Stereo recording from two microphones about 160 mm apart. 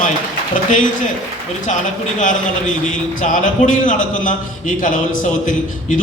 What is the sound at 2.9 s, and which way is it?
A man's voice, 55° left (ahead or behind).